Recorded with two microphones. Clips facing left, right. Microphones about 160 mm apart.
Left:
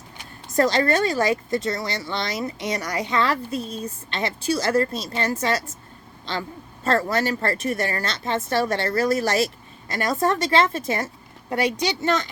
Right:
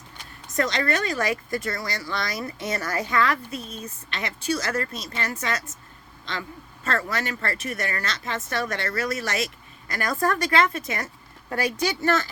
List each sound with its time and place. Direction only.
0.5 s speech: 35° left (ahead or behind)
6.8 s speech: 35° left (ahead or behind)
9.9 s a woman's voice: 25° left (ahead or behind)